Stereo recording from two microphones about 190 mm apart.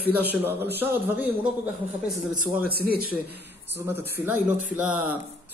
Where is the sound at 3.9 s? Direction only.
10° right (ahead or behind).